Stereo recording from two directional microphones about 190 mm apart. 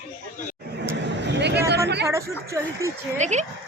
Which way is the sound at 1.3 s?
60° right (ahead or behind).